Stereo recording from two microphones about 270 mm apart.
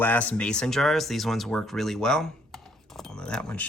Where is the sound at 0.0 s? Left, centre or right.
Centre.